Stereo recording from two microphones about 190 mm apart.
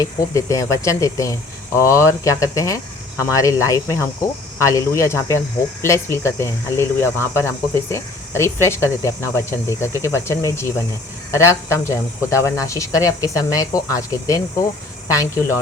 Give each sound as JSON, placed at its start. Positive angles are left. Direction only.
{"t": 0.0, "sound": "speech", "side_deg": 15}